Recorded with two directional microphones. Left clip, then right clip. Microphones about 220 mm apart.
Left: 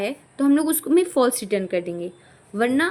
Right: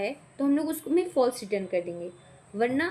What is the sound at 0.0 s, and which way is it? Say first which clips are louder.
Speech: left 6 dB; 35° left (ahead or behind).